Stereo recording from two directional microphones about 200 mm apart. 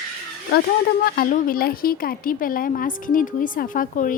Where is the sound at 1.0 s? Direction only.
50° left (ahead or behind).